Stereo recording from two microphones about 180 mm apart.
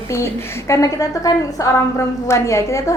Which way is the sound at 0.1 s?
15° left (ahead or behind).